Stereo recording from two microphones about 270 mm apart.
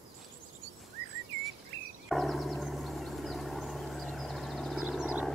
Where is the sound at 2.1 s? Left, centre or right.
Centre.